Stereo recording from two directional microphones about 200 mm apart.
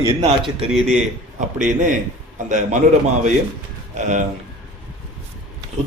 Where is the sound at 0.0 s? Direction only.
20° right (ahead or behind).